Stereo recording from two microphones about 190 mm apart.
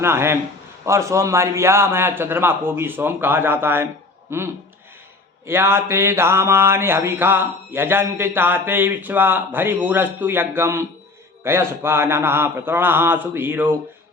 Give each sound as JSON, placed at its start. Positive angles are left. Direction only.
{"t": 0.0, "sound": "mantra", "side_deg": -15}
{"t": 5.5, "sound": "mantra", "side_deg": -10}